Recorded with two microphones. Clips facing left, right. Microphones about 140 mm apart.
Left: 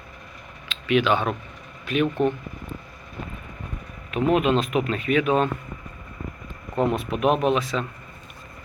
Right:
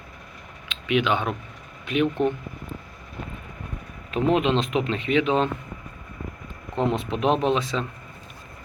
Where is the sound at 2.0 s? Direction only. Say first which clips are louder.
Left 1 dB; 15° left (ahead or behind).